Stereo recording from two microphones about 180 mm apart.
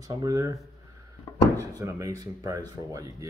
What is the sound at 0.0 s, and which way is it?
Speech, 20° right (ahead or behind).